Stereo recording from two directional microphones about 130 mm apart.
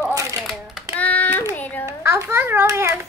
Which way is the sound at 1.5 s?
15° left (ahead or behind).